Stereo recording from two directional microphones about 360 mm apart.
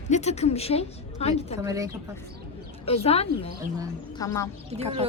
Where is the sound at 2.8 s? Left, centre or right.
Centre.